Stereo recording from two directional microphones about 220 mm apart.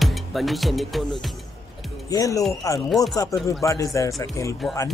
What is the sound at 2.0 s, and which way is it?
Speech, 15° left (ahead or behind).